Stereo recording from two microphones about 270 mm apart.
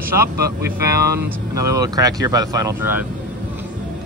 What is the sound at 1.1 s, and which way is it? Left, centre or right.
Speech, centre.